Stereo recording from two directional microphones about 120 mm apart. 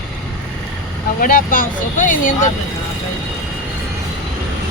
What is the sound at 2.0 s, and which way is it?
Speech, 90° left.